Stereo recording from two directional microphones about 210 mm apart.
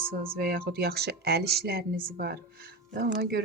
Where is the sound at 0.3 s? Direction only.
45° right (ahead or behind).